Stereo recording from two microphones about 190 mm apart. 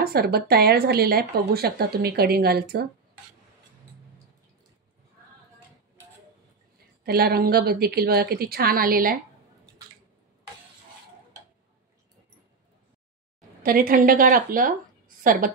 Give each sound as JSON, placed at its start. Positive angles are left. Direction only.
{"t": 0.0, "sound": "speech", "side_deg": -55}
{"t": 7.1, "sound": "a woman's voice", "side_deg": -55}
{"t": 13.6, "sound": "a woman's voice", "side_deg": -50}